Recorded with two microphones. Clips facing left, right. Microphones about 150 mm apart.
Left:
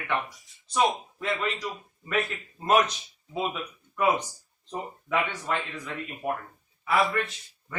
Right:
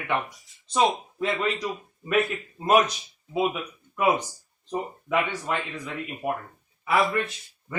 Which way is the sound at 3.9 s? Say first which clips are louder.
Right 2 dB; 10° right (ahead or behind).